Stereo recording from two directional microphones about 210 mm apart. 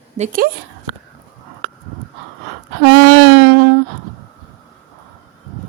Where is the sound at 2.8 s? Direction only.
55° right (ahead or behind).